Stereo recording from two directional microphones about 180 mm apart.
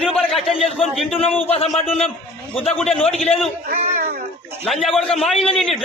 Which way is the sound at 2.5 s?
30° left (ahead or behind).